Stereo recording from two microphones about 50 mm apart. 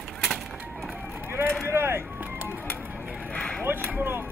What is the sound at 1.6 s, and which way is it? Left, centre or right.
Vehicle, right.